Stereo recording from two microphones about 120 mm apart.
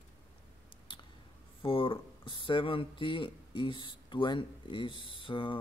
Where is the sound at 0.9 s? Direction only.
40° left (ahead or behind).